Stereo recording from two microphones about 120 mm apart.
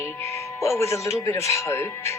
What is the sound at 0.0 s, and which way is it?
Speech, 25° left (ahead or behind).